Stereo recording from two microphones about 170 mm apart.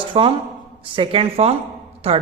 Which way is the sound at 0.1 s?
30° right (ahead or behind).